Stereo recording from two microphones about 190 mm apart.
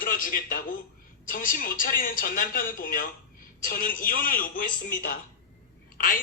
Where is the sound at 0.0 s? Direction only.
45° left (ahead or behind).